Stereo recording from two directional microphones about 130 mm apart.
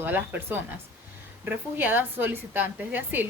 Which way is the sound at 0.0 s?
15° right (ahead or behind).